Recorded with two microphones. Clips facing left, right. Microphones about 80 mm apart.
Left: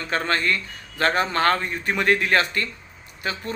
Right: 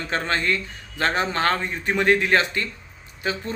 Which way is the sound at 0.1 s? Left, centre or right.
Right.